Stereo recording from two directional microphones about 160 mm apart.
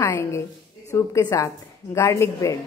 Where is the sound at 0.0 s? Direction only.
15° left (ahead or behind).